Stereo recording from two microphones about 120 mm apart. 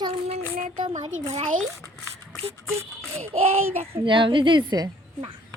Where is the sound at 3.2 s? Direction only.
60° right (ahead or behind).